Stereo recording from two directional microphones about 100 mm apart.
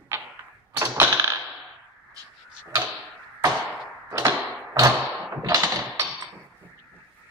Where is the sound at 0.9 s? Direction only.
25° right (ahead or behind).